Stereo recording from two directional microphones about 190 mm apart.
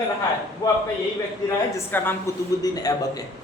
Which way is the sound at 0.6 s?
20° left (ahead or behind).